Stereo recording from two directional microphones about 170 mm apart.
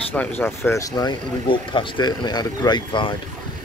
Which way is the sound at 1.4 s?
30° left (ahead or behind).